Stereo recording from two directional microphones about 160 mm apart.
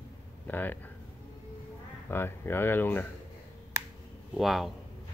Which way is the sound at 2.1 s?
15° left (ahead or behind).